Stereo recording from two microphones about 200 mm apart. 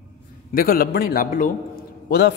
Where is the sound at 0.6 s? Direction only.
45° left (ahead or behind).